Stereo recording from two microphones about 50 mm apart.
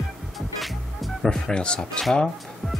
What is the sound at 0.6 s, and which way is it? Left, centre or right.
Music, centre.